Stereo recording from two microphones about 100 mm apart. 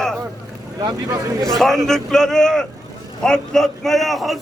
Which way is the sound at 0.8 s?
35° right (ahead or behind).